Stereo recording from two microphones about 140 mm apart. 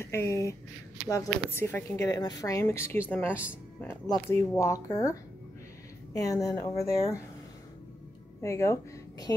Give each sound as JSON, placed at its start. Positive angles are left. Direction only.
{"t": 0.0, "sound": "speech", "side_deg": 20}
{"t": 6.1, "sound": "speech", "side_deg": 25}
{"t": 8.4, "sound": "speech", "side_deg": 20}